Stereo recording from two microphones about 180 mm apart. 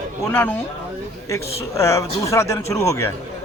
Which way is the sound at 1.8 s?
15° left (ahead or behind).